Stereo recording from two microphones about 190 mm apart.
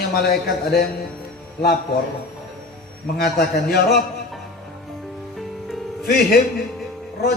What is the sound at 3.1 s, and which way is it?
Speech, 55° left (ahead or behind).